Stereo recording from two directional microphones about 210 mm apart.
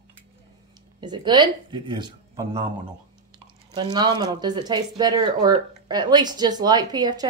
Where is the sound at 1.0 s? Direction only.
20° right (ahead or behind).